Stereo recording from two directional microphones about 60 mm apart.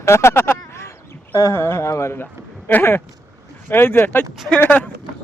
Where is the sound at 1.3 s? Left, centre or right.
Left.